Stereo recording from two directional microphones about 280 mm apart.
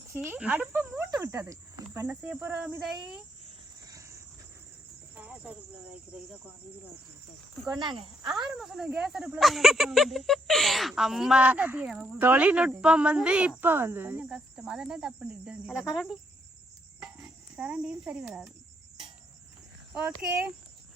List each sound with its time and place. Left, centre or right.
0.1 s speech: centre
3.4 s a sound: centre
5.1 s speech: centre
7.8 s speech: centre
8.4 s speech: centre
17.2 s speech: centre